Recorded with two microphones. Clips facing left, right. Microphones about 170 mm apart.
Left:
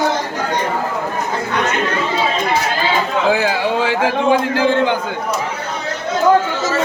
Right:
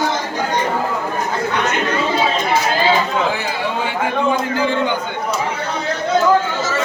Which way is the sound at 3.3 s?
90° left.